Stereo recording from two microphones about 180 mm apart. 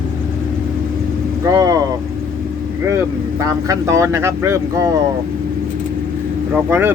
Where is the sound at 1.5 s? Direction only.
20° right (ahead or behind).